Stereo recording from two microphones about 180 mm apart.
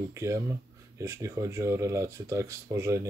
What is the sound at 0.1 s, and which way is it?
Speech, 15° right (ahead or behind).